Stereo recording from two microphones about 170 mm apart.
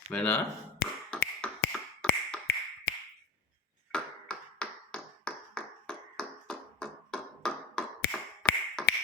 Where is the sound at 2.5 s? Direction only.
90° left.